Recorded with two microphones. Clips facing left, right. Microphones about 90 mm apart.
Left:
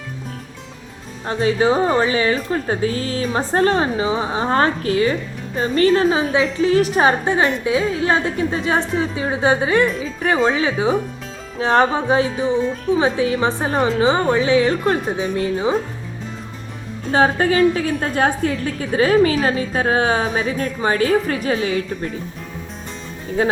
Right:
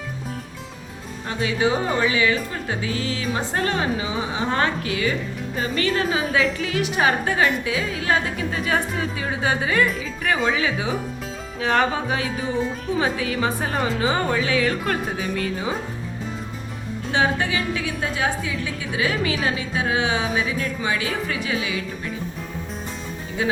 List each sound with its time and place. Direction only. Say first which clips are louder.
1.3 s a woman's voice: left 5 dB; 35° left (ahead or behind)
17.1 s a woman's voice: left 6 dB; 40° left (ahead or behind)
23.4 s speech: left 5 dB; 40° left (ahead or behind)